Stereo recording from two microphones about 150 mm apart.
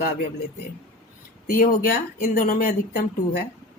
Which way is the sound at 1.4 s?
80° left.